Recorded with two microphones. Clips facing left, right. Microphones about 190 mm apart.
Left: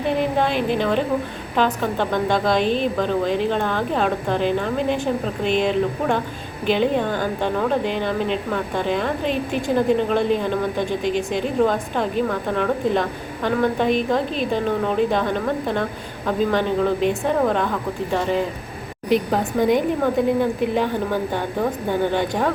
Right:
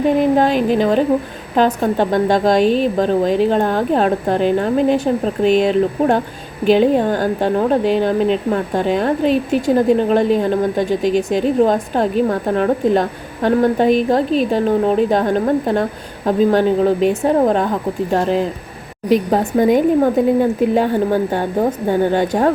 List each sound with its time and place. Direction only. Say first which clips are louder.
0.0 s a woman's voice: right 7 dB; 40° right (ahead or behind)